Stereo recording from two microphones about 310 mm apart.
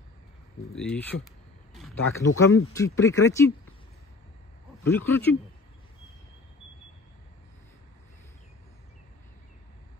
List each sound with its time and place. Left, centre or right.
0.7 s speech: centre
1.7 s a sound: centre
2.3 s speech: left
2.7 s speech: centre
4.8 s speech: centre